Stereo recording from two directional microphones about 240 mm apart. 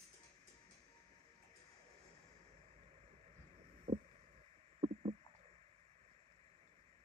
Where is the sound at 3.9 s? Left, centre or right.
Right.